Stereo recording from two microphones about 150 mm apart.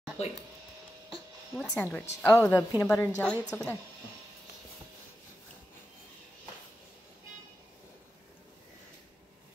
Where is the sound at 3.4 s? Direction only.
5° left (ahead or behind).